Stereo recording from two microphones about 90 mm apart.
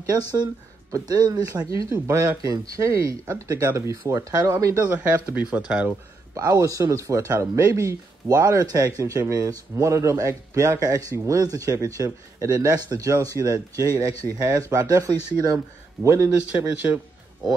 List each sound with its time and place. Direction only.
0.9 s speech: 45° right (ahead or behind)
4.8 s speech: 15° right (ahead or behind)
6.3 s speech: 40° right (ahead or behind)
16.3 s speech: 15° right (ahead or behind)